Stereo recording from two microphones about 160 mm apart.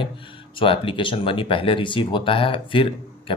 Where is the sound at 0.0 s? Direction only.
35° left (ahead or behind).